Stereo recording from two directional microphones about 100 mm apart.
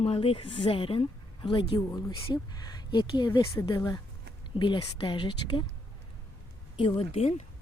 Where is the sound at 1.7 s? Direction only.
35° left (ahead or behind).